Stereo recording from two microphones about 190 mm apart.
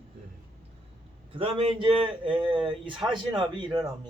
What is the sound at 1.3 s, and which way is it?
A man's voice, 30° right (ahead or behind).